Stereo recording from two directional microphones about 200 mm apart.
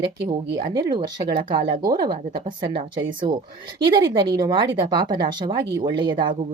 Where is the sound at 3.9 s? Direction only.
20° right (ahead or behind).